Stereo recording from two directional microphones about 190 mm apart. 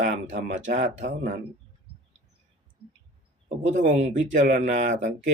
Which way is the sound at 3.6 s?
40° right (ahead or behind).